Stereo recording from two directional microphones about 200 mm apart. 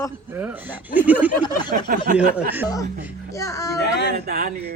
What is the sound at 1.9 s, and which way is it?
Speech, 45° right (ahead or behind).